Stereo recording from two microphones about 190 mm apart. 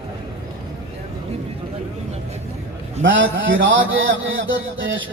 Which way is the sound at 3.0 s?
85° right.